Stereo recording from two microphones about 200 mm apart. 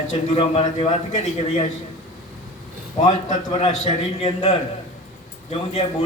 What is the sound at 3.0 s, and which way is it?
A man's voice, 35° left (ahead or behind).